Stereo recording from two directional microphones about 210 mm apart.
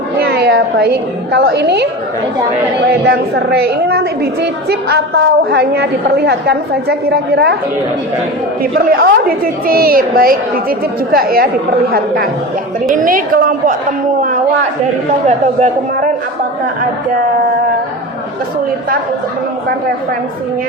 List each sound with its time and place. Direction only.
0.2 s a woman's voice: 50° right (ahead or behind)
8.9 s a woman's voice: 45° right (ahead or behind)
15.3 s a woman's voice: 35° right (ahead or behind)